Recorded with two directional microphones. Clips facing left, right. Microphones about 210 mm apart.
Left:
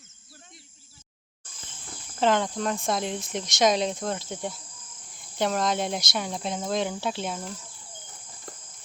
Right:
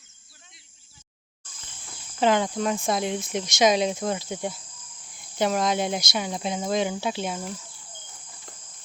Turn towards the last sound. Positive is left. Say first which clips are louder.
# right 2 dB
turn(degrees=-5)  # may be behind; listen again after turning